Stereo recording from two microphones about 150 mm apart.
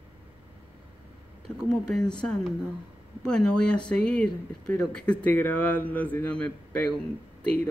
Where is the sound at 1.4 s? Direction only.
Centre (ahead or behind).